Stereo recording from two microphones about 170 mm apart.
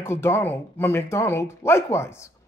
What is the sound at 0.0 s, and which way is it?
Speech, 15° left (ahead or behind).